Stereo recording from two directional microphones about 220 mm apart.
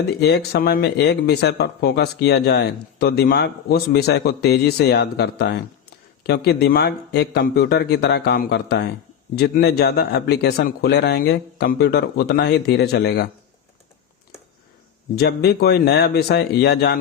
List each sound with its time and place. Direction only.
0.1 s speech: 50° left (ahead or behind)
15.1 s speech: 45° left (ahead or behind)